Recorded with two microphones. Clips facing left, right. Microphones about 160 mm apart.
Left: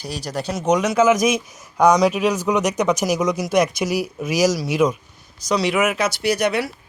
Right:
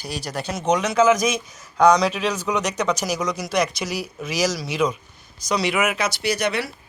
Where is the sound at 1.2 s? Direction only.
20° left (ahead or behind).